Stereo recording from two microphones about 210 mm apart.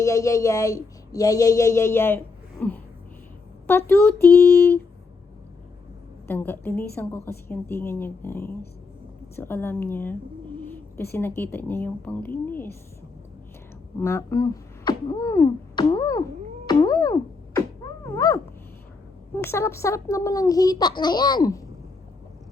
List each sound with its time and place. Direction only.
0.0 s a woman's voice: 15° left (ahead or behind)
6.2 s a woman's voice: 10° left (ahead or behind)
14.0 s speech: 15° left (ahead or behind)
19.4 s a woman's voice: 10° left (ahead or behind)